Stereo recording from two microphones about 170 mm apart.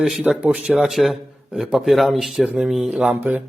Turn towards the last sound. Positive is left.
turn(degrees=-10)  # may be behind; listen again after turning